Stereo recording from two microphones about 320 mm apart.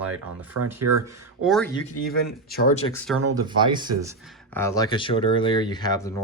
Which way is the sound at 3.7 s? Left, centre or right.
Centre.